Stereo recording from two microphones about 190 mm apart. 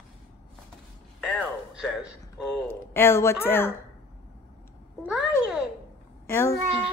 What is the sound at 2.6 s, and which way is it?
A woman's voice, 10° left (ahead or behind).